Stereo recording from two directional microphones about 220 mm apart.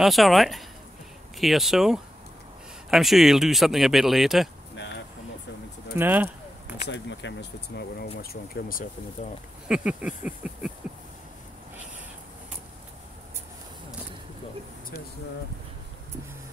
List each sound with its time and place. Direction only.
0.0 s speech: centre (ahead or behind)
5.9 s a sound: 10° right (ahead or behind)
6.9 s speech: 55° left (ahead or behind)
9.7 s speech: 5° right (ahead or behind)